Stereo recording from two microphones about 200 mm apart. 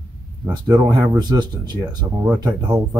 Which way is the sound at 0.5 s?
20° right (ahead or behind).